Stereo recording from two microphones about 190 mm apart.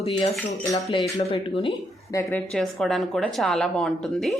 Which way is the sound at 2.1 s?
10° left (ahead or behind).